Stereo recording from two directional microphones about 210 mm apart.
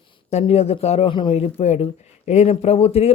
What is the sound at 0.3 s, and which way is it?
A man's voice, 30° left (ahead or behind).